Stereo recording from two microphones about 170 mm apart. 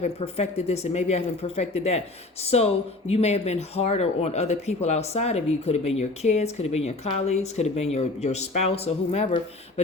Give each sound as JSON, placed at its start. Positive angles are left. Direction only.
{"t": 0.0, "sound": "speech", "side_deg": 35}